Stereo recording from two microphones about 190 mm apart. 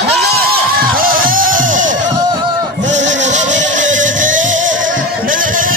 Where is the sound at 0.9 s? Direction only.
50° right (ahead or behind).